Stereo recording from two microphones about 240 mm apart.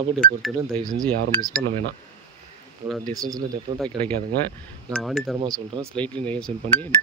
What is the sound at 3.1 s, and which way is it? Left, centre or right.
Speech, centre.